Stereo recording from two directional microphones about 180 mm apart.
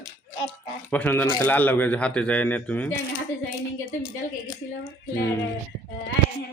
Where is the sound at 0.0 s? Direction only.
30° left (ahead or behind).